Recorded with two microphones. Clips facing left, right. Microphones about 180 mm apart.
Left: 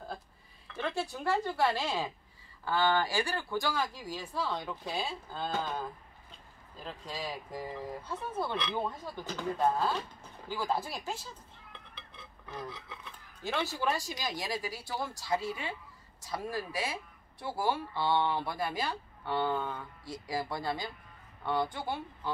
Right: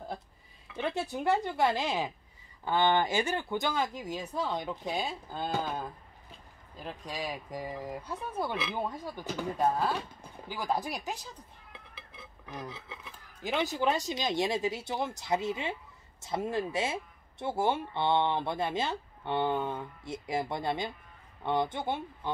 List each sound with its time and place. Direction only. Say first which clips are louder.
0.7 s speech: right 2 dB; 20° right (ahead or behind)
11.7 s a sound: right 2 dB; 5° right (ahead or behind)
12.9 s speech: right 1 dB; 15° right (ahead or behind)